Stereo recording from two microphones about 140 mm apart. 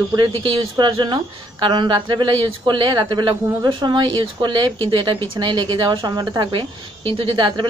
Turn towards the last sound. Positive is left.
turn(degrees=-35)  # may be behind; listen again after turning